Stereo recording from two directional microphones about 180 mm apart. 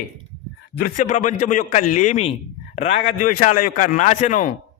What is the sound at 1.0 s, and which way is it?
A man's voice, 40° left (ahead or behind).